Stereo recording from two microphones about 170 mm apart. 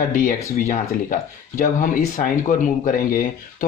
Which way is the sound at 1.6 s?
50° left (ahead or behind).